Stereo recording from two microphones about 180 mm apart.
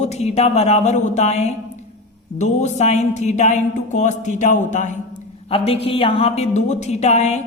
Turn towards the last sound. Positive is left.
turn(degrees=40)  # may be behind; listen again after turning